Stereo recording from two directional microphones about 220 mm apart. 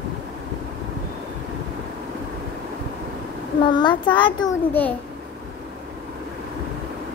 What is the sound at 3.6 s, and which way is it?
Speech, 20° left (ahead or behind).